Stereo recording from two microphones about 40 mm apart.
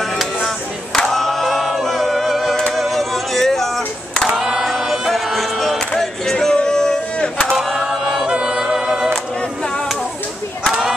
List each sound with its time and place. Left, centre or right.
0.9 s choir: centre
2.7 s a sound: centre
4.4 s choir: centre
4.6 s a sound: centre
7.5 s chant: centre
8.3 s music: centre